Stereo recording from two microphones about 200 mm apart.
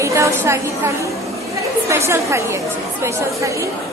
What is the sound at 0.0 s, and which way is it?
A woman's voice, 15° right (ahead or behind).